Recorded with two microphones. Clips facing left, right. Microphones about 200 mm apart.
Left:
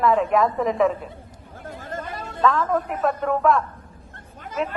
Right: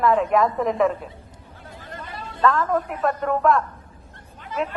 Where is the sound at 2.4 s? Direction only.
Centre (ahead or behind).